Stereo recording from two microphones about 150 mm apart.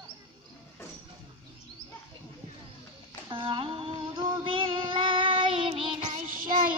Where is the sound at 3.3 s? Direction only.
35° right (ahead or behind).